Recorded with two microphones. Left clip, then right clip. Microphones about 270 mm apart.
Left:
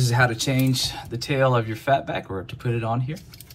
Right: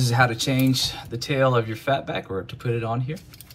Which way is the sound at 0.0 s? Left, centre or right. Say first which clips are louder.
Right 1 dB; centre.